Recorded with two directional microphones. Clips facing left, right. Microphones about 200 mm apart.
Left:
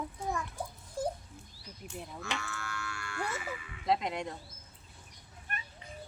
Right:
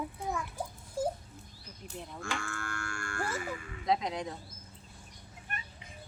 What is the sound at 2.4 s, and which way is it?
Moo, 50° right (ahead or behind).